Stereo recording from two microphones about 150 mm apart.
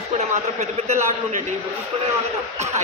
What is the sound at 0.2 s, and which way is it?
Speech, 45° right (ahead or behind).